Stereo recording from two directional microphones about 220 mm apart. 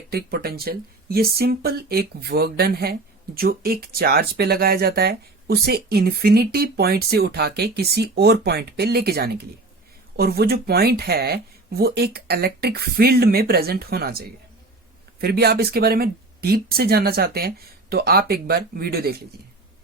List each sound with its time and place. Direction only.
0.1 s speech: 45° right (ahead or behind)